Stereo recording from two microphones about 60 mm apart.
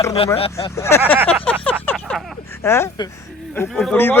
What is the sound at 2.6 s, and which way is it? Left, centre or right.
Speech, left.